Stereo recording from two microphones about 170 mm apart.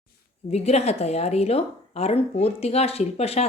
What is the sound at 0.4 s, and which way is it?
A woman's voice, 40° left (ahead or behind).